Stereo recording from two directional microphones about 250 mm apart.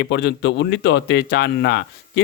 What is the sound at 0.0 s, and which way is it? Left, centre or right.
Speech, left.